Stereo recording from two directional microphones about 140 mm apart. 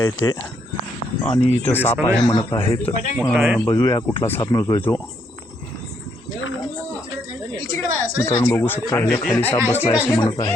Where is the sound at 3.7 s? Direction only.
25° left (ahead or behind).